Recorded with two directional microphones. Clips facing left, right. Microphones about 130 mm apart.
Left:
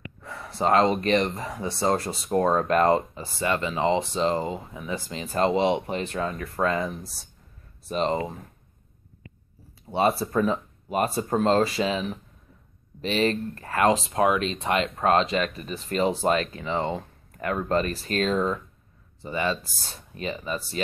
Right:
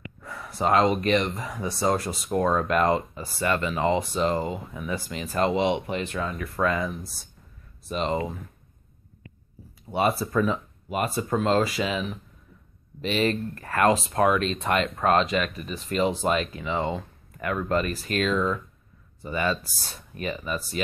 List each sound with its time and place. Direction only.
0.2 s gasp: 30° left (ahead or behind)
1.0 s speech: 35° left (ahead or behind)
3.2 s speech: 20° left (ahead or behind); by 8.2 s 35° left (ahead or behind)
9.9 s speech: 30° left (ahead or behind)
19.2 s speech: 25° left (ahead or behind)